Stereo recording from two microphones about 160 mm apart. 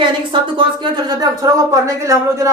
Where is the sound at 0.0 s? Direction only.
30° right (ahead or behind).